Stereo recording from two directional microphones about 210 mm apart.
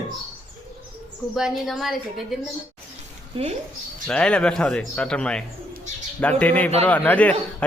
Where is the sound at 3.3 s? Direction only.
25° right (ahead or behind).